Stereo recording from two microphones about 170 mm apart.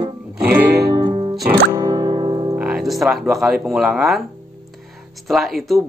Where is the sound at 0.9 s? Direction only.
30° right (ahead or behind).